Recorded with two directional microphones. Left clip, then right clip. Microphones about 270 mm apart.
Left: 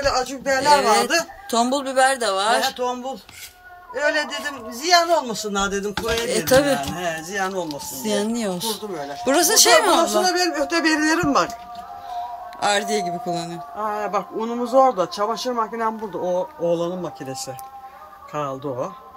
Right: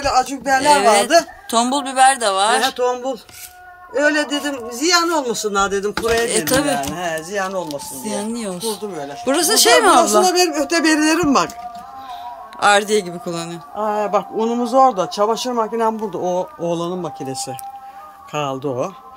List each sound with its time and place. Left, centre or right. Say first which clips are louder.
0.0 s speech: right 4 dB; right
0.7 s a man's voice: right 3 dB; centre
3.9 s a man's voice: right 5 dB; right
6.2 s speech: even; centre
7.0 s a man's voice: right 3 dB; centre
7.6 s speech: right 1 dB; centre
10.2 s speech: right 4 dB; right
12.5 s a man's voice: right 7 dB; centre
13.8 s speech: right 6 dB; right
16.6 s speech: left 3 dB; right
17.0 s a man's voice: right 4 dB; right